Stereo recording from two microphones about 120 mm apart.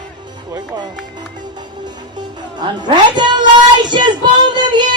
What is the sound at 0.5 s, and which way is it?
Speech, 35° right (ahead or behind).